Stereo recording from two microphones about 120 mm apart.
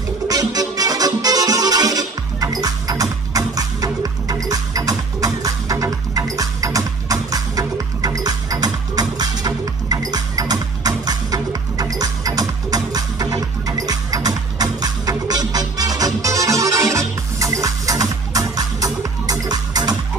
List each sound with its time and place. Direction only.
0.3 s music: 30° right (ahead or behind)